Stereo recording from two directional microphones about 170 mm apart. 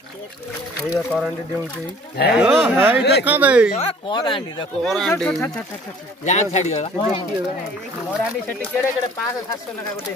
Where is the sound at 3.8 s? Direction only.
30° left (ahead or behind).